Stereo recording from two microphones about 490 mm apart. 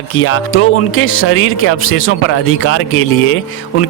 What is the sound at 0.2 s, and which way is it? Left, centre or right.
Speech, left.